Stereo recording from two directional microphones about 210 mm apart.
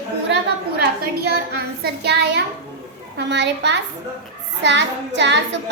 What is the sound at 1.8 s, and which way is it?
Speech, 50° right (ahead or behind).